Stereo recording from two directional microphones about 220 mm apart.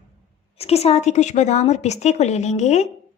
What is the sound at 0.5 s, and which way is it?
A woman's voice, 30° left (ahead or behind).